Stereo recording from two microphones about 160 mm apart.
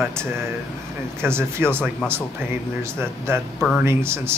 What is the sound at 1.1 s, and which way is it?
Speech, 15° right (ahead or behind).